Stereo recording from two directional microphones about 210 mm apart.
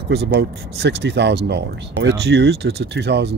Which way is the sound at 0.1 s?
55° right (ahead or behind).